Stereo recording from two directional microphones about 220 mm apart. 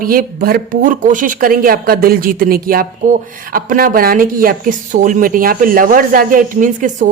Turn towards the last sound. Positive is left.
turn(degrees=-35)  # may be behind; listen again after turning